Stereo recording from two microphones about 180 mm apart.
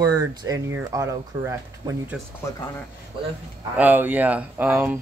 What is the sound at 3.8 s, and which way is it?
Speech, 10° right (ahead or behind).